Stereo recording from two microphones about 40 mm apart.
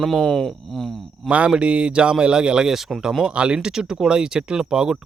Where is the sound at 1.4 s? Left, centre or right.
Right.